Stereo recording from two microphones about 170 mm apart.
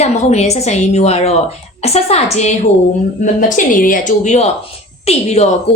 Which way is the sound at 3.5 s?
55° left (ahead or behind).